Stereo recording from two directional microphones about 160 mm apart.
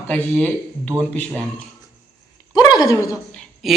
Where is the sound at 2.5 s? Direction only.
25° left (ahead or behind).